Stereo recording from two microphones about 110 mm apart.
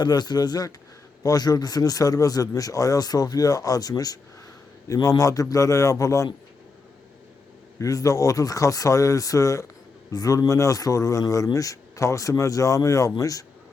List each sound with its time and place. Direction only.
0.0 s a man's voice: 40° left (ahead or behind)
7.8 s a man's voice: 30° left (ahead or behind)